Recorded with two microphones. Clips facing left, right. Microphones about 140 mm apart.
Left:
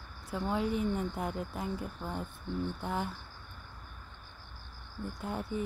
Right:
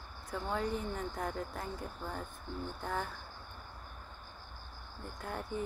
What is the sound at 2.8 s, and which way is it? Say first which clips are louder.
Speech: right 1 dB; 10° left (ahead or behind).